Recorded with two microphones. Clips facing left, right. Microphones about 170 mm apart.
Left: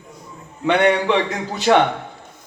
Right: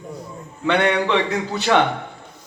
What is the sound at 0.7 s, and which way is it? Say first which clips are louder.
A man's voice: left 2 dB; 15° left (ahead or behind).